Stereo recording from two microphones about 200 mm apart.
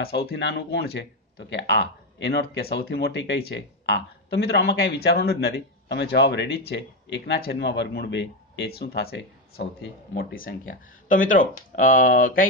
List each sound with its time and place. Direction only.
0.0 s speech: 55° left (ahead or behind)
10.1 s speech: 45° left (ahead or behind)